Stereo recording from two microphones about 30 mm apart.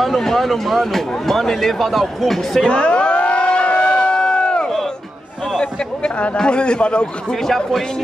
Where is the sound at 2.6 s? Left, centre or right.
Left.